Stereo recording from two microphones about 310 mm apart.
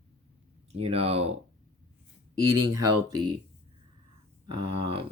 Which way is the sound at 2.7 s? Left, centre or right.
Centre.